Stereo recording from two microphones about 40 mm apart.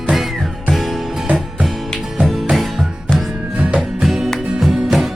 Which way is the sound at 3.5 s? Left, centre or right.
Right.